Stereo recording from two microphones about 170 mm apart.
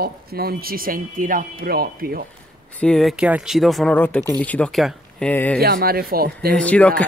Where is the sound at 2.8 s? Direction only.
5° left (ahead or behind).